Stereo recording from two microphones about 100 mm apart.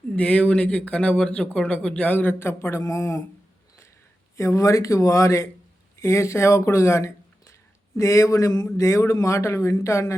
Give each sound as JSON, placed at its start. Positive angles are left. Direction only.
{"t": 0.2, "sound": "speech", "side_deg": 10}
{"t": 4.4, "sound": "a man's voice", "side_deg": 30}